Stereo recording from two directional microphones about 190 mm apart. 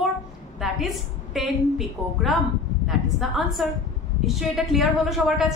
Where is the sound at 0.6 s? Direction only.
Centre (ahead or behind).